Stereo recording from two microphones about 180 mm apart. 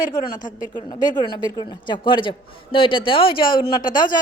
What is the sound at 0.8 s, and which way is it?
A woman's voice, 25° left (ahead or behind).